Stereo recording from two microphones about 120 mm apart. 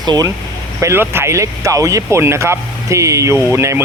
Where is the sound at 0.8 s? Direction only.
20° right (ahead or behind).